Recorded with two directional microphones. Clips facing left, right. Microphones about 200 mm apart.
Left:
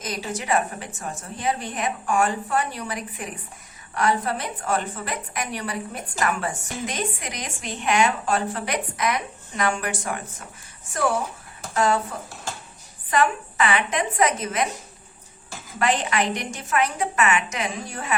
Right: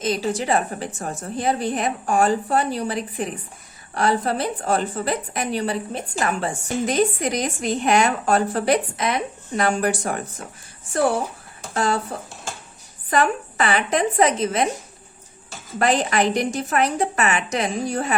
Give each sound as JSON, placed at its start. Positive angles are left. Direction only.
{"t": 0.0, "sound": "a woman's voice", "side_deg": -30}
{"t": 11.7, "sound": "speech", "side_deg": -35}
{"t": 13.1, "sound": "a woman's voice", "side_deg": -35}
{"t": 15.8, "sound": "a woman's voice", "side_deg": -40}